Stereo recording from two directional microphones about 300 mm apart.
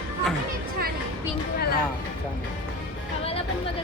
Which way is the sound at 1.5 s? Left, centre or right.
Left.